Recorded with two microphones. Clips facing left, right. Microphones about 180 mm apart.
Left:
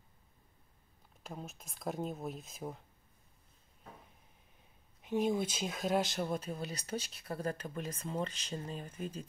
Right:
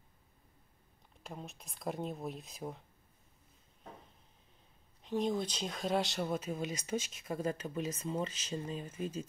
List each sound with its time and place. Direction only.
1.2 s speech: centre (ahead or behind)
5.0 s speech: 5° left (ahead or behind)
6.6 s speech: 35° left (ahead or behind)
7.4 s speech: 10° right (ahead or behind)